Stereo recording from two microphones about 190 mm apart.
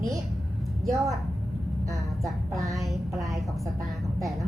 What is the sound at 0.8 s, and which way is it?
Speech, centre (ahead or behind).